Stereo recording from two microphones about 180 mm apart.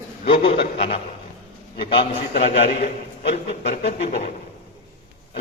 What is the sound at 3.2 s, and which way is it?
Speech, 65° left (ahead or behind).